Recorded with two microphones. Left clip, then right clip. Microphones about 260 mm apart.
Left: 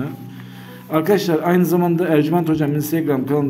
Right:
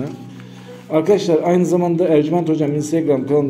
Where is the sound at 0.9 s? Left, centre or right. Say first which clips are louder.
Right 2 dB; centre.